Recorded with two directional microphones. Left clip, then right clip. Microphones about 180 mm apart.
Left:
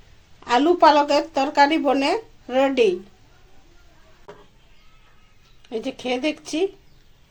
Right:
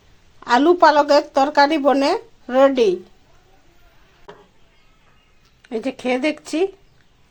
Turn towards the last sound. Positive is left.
turn(degrees=-20)  # may be behind; listen again after turning